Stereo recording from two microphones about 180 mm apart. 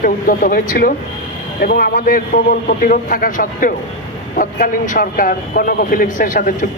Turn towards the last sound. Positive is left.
turn(degrees=45)  # may be behind; listen again after turning